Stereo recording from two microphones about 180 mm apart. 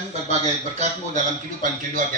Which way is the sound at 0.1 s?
40° right (ahead or behind).